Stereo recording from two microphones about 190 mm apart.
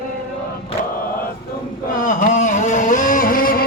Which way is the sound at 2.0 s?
40° left (ahead or behind).